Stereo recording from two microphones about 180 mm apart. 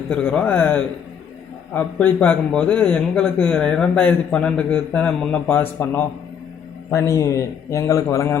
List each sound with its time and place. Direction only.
0.1 s a man's voice: 5° left (ahead or behind)